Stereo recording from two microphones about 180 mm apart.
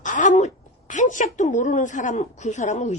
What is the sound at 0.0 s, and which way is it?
A woman's voice, 45° left (ahead or behind).